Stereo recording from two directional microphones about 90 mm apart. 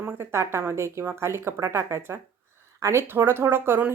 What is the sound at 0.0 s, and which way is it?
Speech, 30° right (ahead or behind).